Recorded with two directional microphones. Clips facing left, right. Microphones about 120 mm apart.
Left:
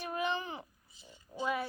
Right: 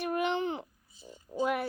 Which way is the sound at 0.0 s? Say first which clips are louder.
Right 5 dB; 65° right (ahead or behind).